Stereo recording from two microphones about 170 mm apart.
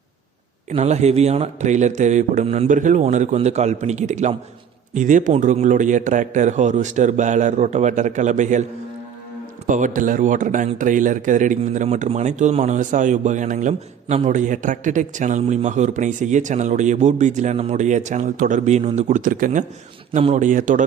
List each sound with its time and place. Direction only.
0.7 s a man's voice: 40° right (ahead or behind)
9.6 s a man's voice: 50° right (ahead or behind)